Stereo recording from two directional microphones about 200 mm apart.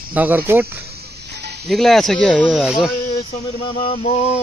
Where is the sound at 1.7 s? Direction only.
Centre (ahead or behind).